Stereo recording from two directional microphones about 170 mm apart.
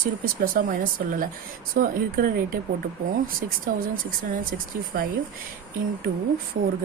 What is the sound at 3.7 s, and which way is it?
Speech, 55° right (ahead or behind).